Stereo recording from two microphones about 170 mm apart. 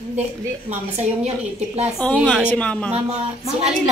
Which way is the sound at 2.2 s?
10° left (ahead or behind).